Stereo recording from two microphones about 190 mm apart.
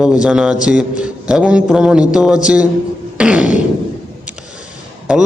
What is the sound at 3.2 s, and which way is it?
Fart, 5° right (ahead or behind).